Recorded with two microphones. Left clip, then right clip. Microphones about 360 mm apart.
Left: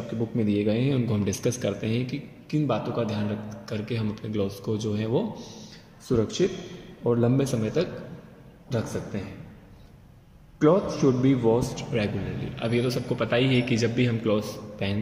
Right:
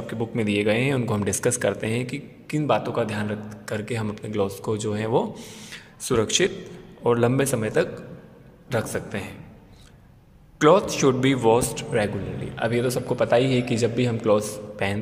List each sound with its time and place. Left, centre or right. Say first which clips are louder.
0.4 s a man's voice: right 4 dB; right
5.1 s a man's voice: right 4 dB; right
10.6 s a man's voice: right 4 dB; right